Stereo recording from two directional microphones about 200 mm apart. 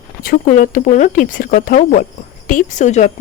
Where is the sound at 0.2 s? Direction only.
45° left (ahead or behind).